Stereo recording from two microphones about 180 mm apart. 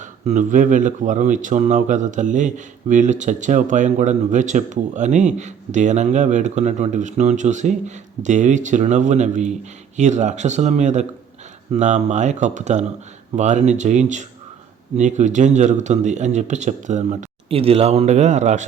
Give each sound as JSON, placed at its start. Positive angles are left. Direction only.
{"t": 0.0, "sound": "speech", "side_deg": -45}